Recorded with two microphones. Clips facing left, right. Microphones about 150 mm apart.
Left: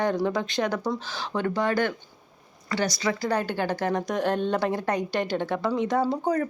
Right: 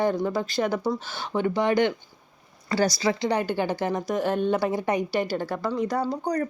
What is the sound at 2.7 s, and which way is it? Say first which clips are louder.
Speech: right 3 dB; 35° right (ahead or behind).